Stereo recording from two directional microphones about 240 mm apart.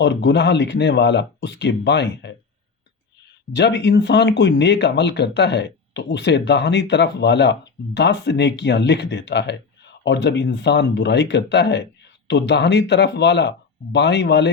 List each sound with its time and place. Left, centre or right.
0.0 s speech: left
3.5 s speech: left